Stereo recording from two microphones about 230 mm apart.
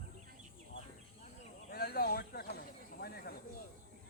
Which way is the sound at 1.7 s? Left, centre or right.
Left.